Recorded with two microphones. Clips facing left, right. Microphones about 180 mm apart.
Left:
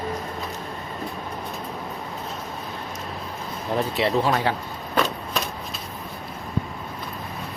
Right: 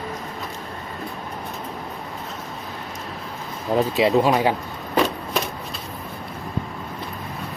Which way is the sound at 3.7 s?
15° right (ahead or behind).